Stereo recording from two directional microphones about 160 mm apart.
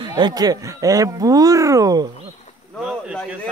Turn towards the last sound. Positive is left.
turn(degrees=-5)  # may be behind; listen again after turning